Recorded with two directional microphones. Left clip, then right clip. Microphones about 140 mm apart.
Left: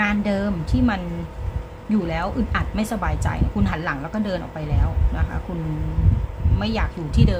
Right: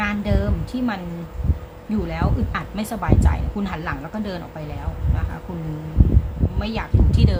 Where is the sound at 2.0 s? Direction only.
15° left (ahead or behind).